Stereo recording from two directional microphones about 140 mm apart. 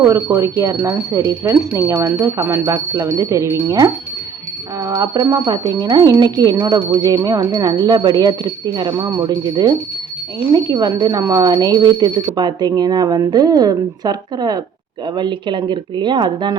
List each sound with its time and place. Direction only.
0.1 s speech: 20° right (ahead or behind)